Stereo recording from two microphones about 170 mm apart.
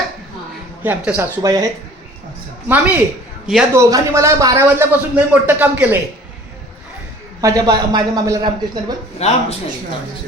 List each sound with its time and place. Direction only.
0.8 s a man's voice: 10° right (ahead or behind)
1.4 s a woman's voice: 20° right (ahead or behind)
2.6 s a man's voice: 10° right (ahead or behind)
7.4 s a woman's voice: 25° right (ahead or behind)
9.1 s speech: 40° left (ahead or behind)